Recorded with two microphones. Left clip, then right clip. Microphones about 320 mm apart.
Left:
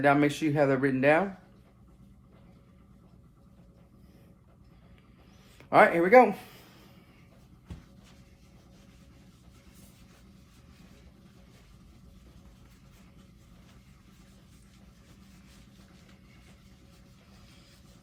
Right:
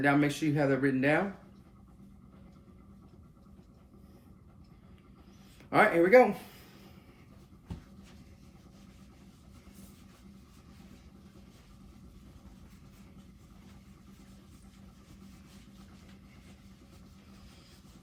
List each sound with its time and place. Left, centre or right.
0.0 s speech: centre
5.7 s speech: centre